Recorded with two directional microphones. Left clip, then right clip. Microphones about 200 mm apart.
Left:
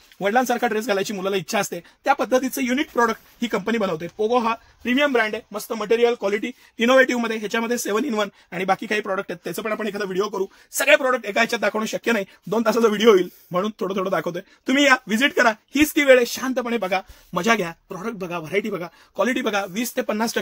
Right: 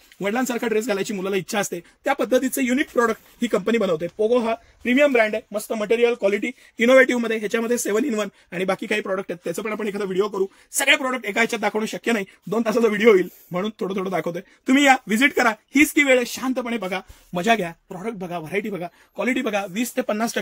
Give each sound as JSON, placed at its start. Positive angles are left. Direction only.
{"t": 0.2, "sound": "speech", "side_deg": 50}
{"t": 2.0, "sound": "speech", "side_deg": 30}
{"t": 4.8, "sound": "speech", "side_deg": 15}
{"t": 6.9, "sound": "speech", "side_deg": 30}